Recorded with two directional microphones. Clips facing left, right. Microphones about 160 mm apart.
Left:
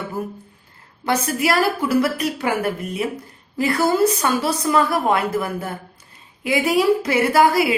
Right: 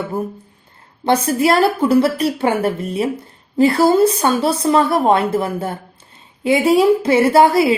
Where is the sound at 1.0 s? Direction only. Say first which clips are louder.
Right 5 dB; 30° right (ahead or behind).